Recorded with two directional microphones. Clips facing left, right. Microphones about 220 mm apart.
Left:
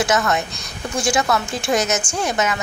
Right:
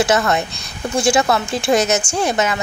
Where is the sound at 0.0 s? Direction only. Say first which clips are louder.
Right 3 dB; 30° right (ahead or behind).